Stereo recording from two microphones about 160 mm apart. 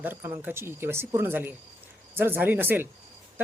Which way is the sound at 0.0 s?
15° right (ahead or behind).